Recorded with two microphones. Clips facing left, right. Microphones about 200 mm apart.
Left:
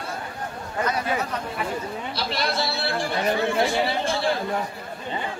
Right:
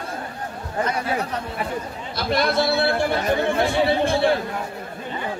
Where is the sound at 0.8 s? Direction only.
30° right (ahead or behind).